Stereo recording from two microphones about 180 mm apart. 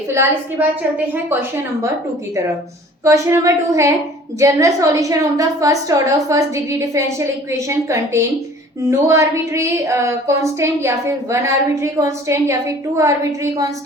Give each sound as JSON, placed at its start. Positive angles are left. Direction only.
{"t": 0.6, "sound": "a woman's voice", "side_deg": -10}
{"t": 3.0, "sound": "a woman's voice", "side_deg": -15}